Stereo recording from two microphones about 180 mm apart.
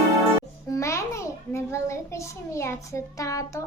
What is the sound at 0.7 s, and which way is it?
A child's voice, 15° left (ahead or behind).